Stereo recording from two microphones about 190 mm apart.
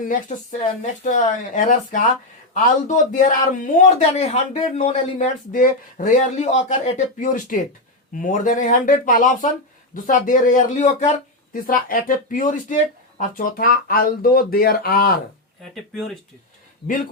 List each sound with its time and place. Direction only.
0.0 s a man's voice: 45° left (ahead or behind)
15.7 s speech: centre (ahead or behind)
16.8 s speech: 60° left (ahead or behind)